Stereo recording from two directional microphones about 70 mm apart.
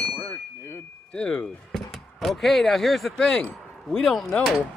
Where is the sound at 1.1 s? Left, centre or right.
Centre.